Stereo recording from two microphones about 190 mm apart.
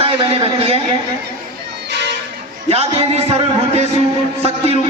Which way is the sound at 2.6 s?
35° right (ahead or behind).